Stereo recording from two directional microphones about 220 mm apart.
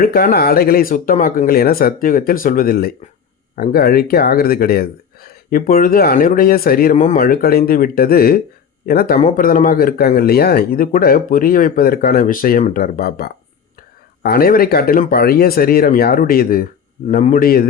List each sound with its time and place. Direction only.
0.0 s speech: 40° left (ahead or behind)